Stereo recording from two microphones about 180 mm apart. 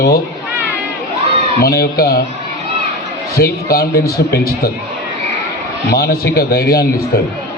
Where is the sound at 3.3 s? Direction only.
60° left (ahead or behind).